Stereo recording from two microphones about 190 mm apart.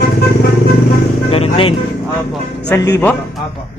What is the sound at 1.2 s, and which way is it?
Speech, 30° left (ahead or behind).